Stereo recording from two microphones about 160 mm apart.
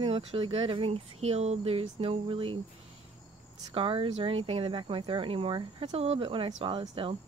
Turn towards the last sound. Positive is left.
turn(degrees=-30)  # may be behind; listen again after turning